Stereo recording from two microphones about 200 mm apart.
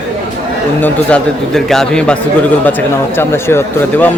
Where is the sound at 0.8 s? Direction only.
5° left (ahead or behind).